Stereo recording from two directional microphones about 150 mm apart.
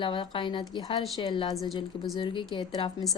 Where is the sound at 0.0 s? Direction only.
30° left (ahead or behind).